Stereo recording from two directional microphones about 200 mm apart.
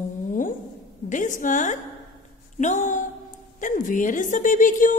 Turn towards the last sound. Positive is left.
turn(degrees=40)  # may be behind; listen again after turning